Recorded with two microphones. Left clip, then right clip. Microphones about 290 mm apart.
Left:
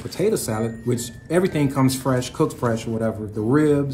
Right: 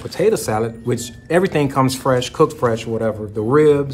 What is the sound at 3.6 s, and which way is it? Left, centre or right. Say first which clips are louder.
Speech: right 7 dB; centre.